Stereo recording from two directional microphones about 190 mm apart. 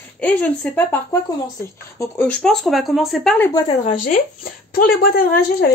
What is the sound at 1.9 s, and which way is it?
Speech, 10° left (ahead or behind).